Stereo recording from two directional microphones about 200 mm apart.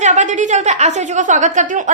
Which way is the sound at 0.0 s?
35° right (ahead or behind).